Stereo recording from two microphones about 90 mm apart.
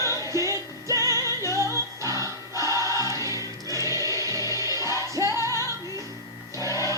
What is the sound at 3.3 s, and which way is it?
Music, 40° left (ahead or behind).